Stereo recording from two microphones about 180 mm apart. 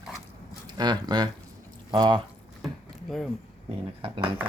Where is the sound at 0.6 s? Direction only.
25° right (ahead or behind).